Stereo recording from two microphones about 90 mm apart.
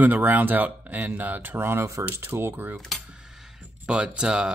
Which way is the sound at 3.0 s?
5° right (ahead or behind).